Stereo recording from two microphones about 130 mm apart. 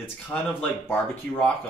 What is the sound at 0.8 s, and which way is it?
Speech, 15° left (ahead or behind).